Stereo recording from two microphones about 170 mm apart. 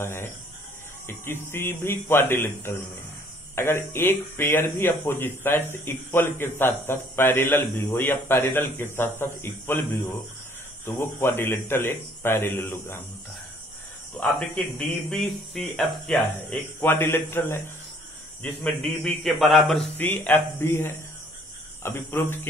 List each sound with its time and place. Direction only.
0.0 s a man's voice: 15° left (ahead or behind)
10.9 s a man's voice: 15° left (ahead or behind)
14.2 s speech: 10° left (ahead or behind)
16.8 s a man's voice: 15° left (ahead or behind)
20.0 s a man's voice: 10° left (ahead or behind)